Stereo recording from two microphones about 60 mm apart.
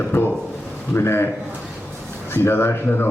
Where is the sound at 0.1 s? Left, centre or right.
Left.